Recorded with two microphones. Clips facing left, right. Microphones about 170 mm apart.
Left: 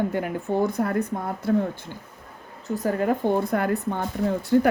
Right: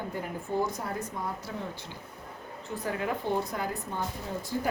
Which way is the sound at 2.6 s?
40° left (ahead or behind).